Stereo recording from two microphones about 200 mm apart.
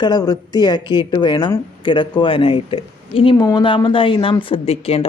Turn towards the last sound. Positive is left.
turn(degrees=30)  # may be behind; listen again after turning